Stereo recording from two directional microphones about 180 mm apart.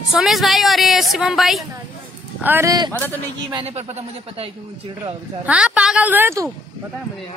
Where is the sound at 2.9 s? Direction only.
10° left (ahead or behind).